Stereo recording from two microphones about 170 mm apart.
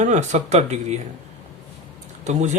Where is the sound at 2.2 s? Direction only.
45° right (ahead or behind).